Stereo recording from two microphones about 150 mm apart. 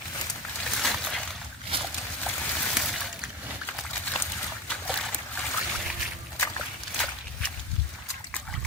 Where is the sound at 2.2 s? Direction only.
Centre (ahead or behind).